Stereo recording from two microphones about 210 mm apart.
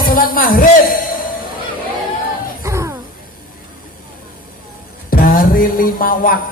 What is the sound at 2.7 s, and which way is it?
Music, 15° right (ahead or behind).